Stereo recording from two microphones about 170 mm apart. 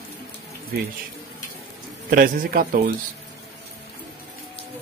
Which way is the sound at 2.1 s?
55° right (ahead or behind).